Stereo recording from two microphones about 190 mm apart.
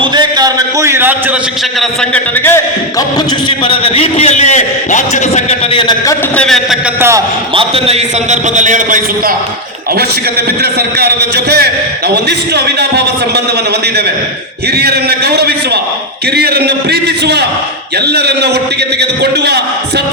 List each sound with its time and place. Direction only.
0.0 s a man's voice: 25° right (ahead or behind)
2.1 s a man's voice: 10° left (ahead or behind)
3.6 s a man's voice: 30° left (ahead or behind)
6.1 s a man's voice: 5° left (ahead or behind)
7.5 s a man's voice: 30° right (ahead or behind)
10.6 s a man's voice: 60° right (ahead or behind)
14.8 s a man's voice: 60° right (ahead or behind)